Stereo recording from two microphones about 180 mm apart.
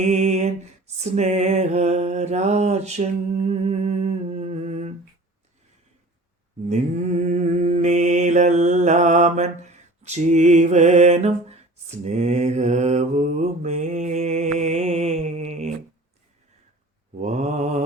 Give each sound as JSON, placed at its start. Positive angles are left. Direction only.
{"t": 0.0, "sound": "music", "side_deg": -40}
{"t": 6.7, "sound": "mantra", "side_deg": -40}
{"t": 17.2, "sound": "mantra", "side_deg": -40}